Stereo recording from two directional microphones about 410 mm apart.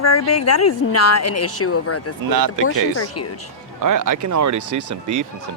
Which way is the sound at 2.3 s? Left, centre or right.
Right.